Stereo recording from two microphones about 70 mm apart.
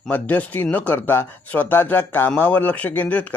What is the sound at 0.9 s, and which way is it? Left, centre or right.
Speech, left.